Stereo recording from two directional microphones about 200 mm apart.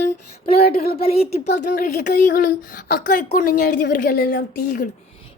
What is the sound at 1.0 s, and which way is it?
Speech, 30° left (ahead or behind).